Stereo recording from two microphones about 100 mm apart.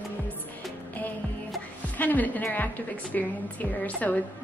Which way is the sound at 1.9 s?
15° left (ahead or behind).